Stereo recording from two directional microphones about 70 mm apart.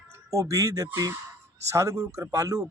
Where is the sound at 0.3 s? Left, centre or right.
Right.